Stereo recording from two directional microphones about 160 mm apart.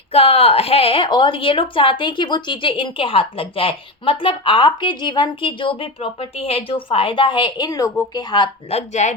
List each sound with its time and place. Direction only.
0.1 s a woman's voice: 40° left (ahead or behind)
8.7 s speech: 45° left (ahead or behind)